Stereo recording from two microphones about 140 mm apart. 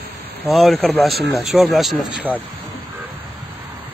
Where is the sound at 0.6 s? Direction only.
Centre (ahead or behind).